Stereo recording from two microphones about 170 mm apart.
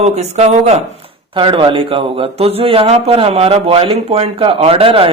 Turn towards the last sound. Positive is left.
turn(degrees=-30)  # may be behind; listen again after turning